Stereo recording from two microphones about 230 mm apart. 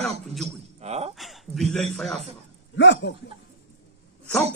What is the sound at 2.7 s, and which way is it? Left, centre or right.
Speech, left.